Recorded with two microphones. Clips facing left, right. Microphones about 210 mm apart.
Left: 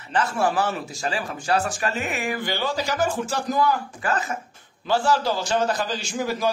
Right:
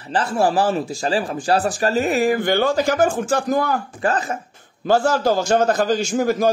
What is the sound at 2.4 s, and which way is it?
A man's voice, 50° right (ahead or behind).